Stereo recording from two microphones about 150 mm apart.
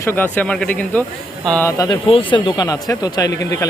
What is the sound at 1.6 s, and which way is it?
Speech, 25° left (ahead or behind).